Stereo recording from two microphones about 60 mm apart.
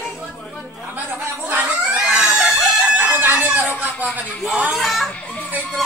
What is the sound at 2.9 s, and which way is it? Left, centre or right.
Chicken, right.